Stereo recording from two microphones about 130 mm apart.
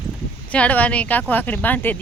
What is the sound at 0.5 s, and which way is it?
A woman's voice, 10° left (ahead or behind).